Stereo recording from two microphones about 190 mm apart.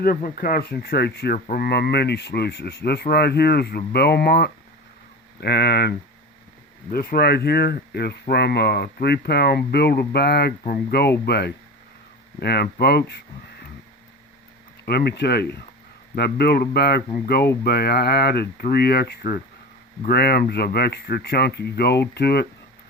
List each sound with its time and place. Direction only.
0.0 s speech: 50° left (ahead or behind)
6.9 s speech: 50° left (ahead or behind)
14.8 s speech: 55° left (ahead or behind)